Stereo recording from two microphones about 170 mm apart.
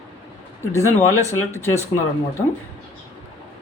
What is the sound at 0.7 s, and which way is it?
Speech, 15° left (ahead or behind).